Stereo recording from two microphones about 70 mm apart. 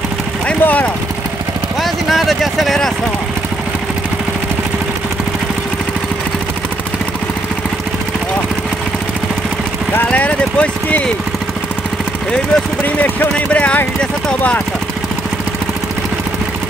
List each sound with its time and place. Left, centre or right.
0.5 s vehicle: left
1.8 s vehicle: centre
9.9 s a sound: left
12.8 s speech: left